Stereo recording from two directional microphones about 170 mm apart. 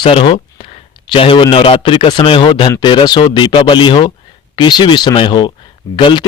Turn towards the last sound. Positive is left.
turn(degrees=30)  # may be behind; listen again after turning